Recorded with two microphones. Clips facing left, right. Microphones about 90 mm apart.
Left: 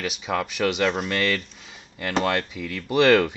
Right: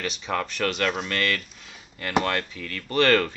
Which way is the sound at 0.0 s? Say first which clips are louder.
Left 2 dB; 5° left (ahead or behind).